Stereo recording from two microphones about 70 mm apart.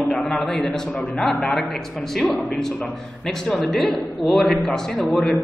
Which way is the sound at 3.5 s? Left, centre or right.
Centre.